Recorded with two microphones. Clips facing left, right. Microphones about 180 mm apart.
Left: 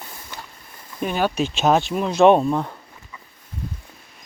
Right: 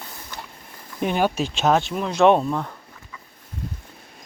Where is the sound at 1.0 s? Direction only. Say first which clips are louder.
Right 1 dB; 15° right (ahead or behind).